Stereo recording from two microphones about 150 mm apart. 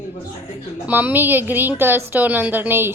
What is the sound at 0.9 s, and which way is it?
A woman's voice, 10° right (ahead or behind).